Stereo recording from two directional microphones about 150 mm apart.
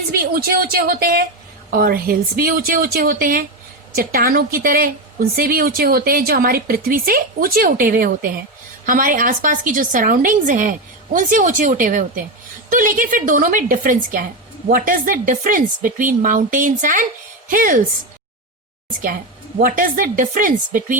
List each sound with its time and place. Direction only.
0.3 s speech: 90° right
1.8 s a woman's voice: 80° right
19.0 s a woman's voice: 65° right (ahead or behind)